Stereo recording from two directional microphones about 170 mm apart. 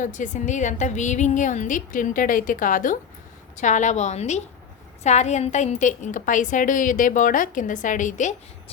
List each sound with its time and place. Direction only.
0.0 s a woman's voice: 50° left (ahead or behind)